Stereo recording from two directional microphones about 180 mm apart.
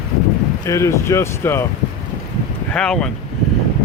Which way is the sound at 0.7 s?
15° left (ahead or behind).